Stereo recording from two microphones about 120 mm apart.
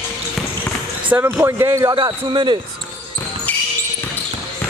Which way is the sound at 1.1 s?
20° right (ahead or behind).